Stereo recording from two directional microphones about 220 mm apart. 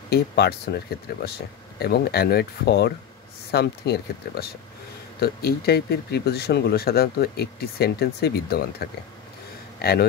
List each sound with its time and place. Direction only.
0.1 s a man's voice: 45° left (ahead or behind)